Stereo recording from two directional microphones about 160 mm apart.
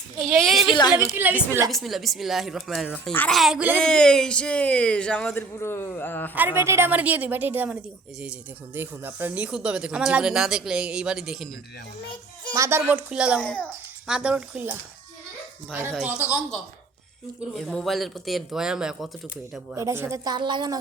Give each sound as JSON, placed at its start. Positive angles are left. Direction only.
{"t": 0.2, "sound": "a woman's voice", "side_deg": 0}
{"t": 0.7, "sound": "a woman's voice", "side_deg": 25}
{"t": 0.9, "sound": "a woman's voice", "side_deg": -15}
{"t": 1.7, "sound": "a man's voice", "side_deg": 0}
{"t": 3.8, "sound": "a man's voice", "side_deg": 5}
{"t": 6.3, "sound": "a woman's voice", "side_deg": -10}
{"t": 12.5, "sound": "a woman's voice", "side_deg": -15}
{"t": 13.4, "sound": "a man's voice", "side_deg": 10}
{"t": 14.1, "sound": "a woman's voice", "side_deg": -5}
{"t": 17.5, "sound": "a man's voice", "side_deg": 0}
{"t": 19.7, "sound": "a woman's voice", "side_deg": -15}